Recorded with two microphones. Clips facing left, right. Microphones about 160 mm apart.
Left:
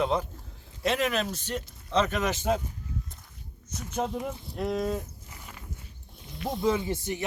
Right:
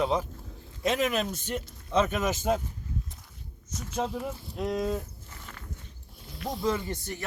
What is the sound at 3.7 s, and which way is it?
Speech, 5° left (ahead or behind).